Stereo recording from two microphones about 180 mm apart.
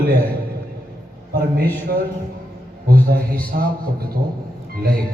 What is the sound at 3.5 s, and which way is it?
Speech, 60° right (ahead or behind).